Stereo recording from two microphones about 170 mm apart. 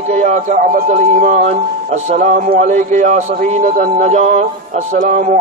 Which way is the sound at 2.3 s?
60° right (ahead or behind).